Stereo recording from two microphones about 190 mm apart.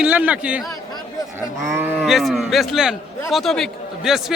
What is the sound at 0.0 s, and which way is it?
Speech, 5° right (ahead or behind).